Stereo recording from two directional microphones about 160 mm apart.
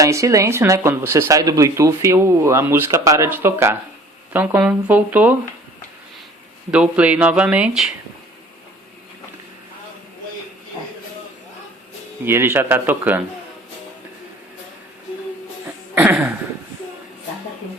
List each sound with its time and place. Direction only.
0.0 s speech: 20° right (ahead or behind)
6.7 s speech: 10° right (ahead or behind)
12.2 s speech: 15° right (ahead or behind)
16.0 s a sound: 10° right (ahead or behind)